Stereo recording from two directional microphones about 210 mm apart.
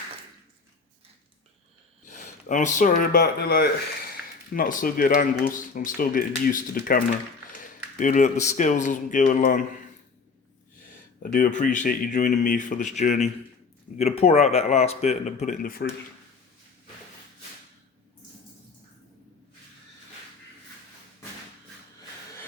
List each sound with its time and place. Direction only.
2.0 s speech: 35° left (ahead or behind)
11.2 s speech: 40° left (ahead or behind)